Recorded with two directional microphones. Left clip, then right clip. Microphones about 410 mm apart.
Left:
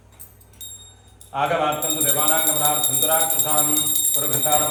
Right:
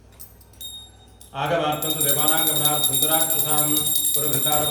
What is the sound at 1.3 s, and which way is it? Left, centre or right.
Speech, centre.